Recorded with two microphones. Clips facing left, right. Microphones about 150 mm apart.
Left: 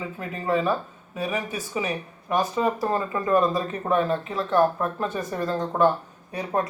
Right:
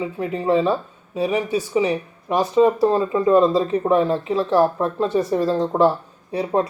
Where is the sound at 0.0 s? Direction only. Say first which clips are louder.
Right 8 dB; 20° right (ahead or behind).